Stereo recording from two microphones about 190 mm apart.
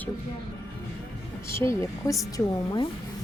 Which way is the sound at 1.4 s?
15° left (ahead or behind).